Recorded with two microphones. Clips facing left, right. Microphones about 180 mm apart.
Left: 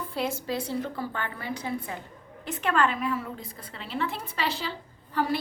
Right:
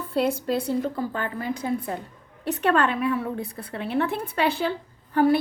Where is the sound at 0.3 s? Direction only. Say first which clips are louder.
Right 6 dB; 60° right (ahead or behind).